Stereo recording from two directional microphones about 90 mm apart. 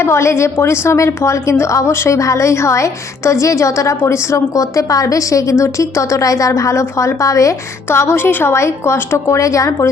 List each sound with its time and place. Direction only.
0.0 s a woman's voice: 30° left (ahead or behind)
7.9 s a woman's voice: 25° left (ahead or behind)